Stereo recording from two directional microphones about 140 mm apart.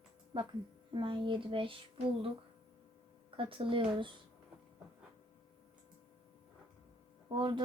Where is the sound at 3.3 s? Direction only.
40° right (ahead or behind).